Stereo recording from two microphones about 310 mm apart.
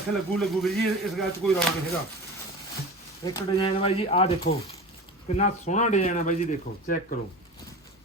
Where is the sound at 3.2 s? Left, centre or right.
Centre.